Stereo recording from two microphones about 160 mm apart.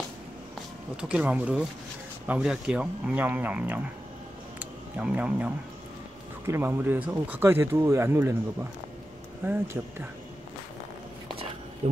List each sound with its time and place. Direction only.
1.0 s speech: 5° right (ahead or behind)
4.6 s music: 10° right (ahead or behind)
6.4 s speech: 15° right (ahead or behind)
9.5 s speech: 15° right (ahead or behind)
11.8 s speech: 35° right (ahead or behind)